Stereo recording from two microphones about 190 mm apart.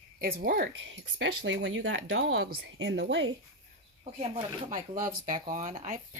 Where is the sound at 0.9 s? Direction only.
85° right.